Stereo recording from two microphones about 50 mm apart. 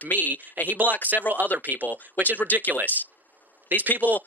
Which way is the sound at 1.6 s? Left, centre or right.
Right.